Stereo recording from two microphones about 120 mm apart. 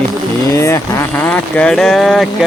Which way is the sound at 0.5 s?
25° left (ahead or behind).